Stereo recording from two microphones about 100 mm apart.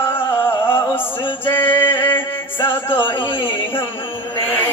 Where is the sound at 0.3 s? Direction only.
20° left (ahead or behind).